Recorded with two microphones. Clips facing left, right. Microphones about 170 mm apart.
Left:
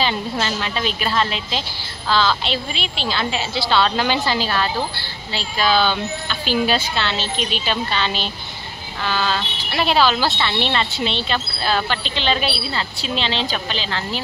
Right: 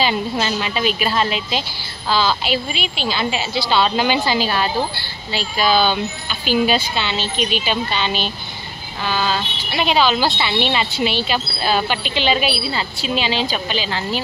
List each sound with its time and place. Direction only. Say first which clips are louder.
0.0 s speech: right 2 dB; 10° right (ahead or behind)
10.2 s speech: right 1 dB; 15° right (ahead or behind)
10.6 s speech: right 4 dB; 5° right (ahead or behind)